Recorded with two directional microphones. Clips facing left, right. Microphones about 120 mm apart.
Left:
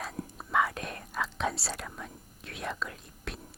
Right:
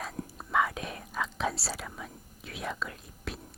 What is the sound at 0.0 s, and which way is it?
Whispering, centre (ahead or behind).